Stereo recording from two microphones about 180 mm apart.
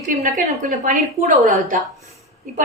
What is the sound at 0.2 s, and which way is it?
A woman's voice, 45° right (ahead or behind).